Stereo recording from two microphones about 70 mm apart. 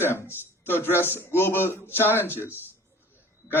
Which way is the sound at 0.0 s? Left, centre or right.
Left.